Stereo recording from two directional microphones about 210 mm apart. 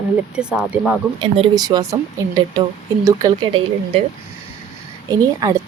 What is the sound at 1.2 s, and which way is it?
A woman's voice, 20° right (ahead or behind).